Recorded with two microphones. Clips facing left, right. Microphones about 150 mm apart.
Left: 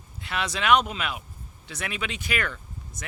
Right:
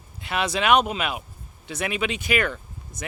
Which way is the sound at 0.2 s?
15° right (ahead or behind).